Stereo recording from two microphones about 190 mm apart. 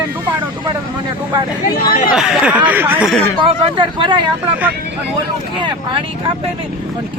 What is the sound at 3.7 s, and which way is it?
Speech, 25° right (ahead or behind).